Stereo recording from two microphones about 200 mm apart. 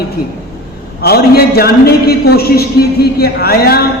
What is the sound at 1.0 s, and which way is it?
A man's voice, 50° left (ahead or behind).